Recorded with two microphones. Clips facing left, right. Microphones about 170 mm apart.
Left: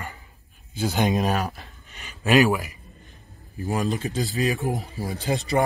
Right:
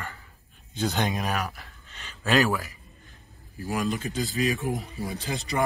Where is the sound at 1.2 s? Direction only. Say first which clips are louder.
Left 5 dB; 35° left (ahead or behind).